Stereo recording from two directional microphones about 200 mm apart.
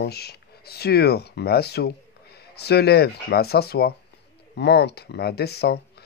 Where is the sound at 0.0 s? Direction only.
55° left (ahead or behind).